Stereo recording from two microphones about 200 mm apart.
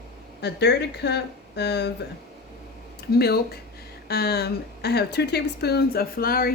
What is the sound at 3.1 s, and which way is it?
A woman's voice, 50° left (ahead or behind).